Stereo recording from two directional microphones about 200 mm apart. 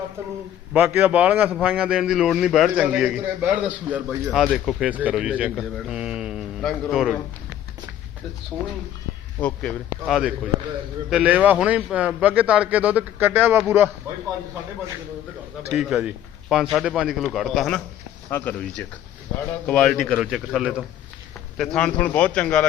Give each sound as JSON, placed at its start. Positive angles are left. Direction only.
{"t": 0.2, "sound": "a man's voice", "side_deg": -10}
{"t": 9.4, "sound": "a man's voice", "side_deg": 5}
{"t": 15.7, "sound": "a man's voice", "side_deg": -5}
{"t": 19.6, "sound": "a man's voice", "side_deg": 5}